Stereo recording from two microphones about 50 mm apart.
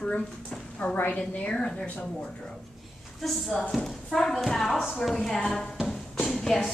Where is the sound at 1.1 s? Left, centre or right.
Centre.